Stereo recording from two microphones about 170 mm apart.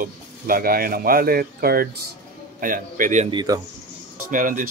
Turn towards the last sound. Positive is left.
turn(degrees=-50)  # may be behind; listen again after turning